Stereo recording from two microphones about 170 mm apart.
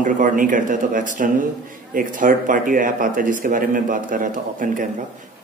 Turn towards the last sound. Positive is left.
turn(degrees=-50)  # may be behind; listen again after turning